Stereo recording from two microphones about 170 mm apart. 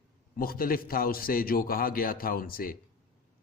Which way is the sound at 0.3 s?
60° left (ahead or behind).